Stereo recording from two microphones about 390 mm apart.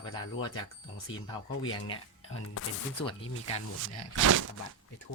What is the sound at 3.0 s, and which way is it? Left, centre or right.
Speech, centre.